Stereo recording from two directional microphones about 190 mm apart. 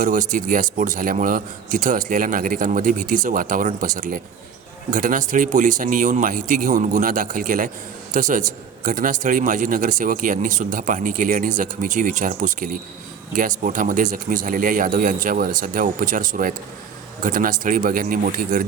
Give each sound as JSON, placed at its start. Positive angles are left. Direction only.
{"t": 0.0, "sound": "a man's voice", "side_deg": -45}